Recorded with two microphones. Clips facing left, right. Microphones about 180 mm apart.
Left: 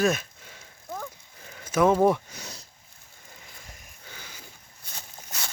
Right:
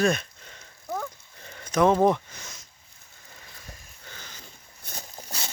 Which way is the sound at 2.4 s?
35° left (ahead or behind).